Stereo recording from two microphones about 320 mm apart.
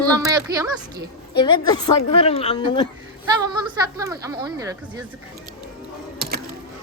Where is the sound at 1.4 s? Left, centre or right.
Centre.